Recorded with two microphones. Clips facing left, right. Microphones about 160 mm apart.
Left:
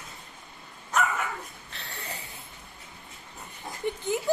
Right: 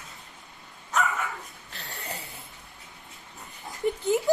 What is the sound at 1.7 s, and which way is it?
Snoring, 35° right (ahead or behind).